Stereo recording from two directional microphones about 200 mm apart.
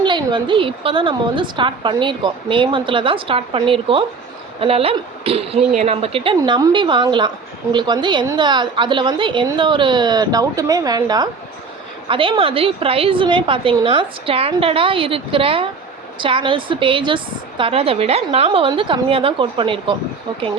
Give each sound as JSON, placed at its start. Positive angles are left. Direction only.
{"t": 0.0, "sound": "a woman's voice", "side_deg": -25}